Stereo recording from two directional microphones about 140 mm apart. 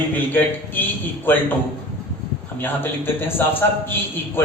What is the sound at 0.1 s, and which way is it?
A man's voice, 15° left (ahead or behind).